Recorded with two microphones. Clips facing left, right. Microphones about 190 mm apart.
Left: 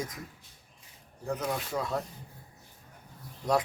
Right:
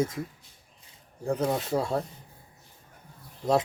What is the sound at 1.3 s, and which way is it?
Speech, 30° right (ahead or behind).